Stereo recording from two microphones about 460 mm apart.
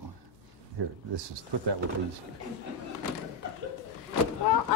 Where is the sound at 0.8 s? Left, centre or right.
Right.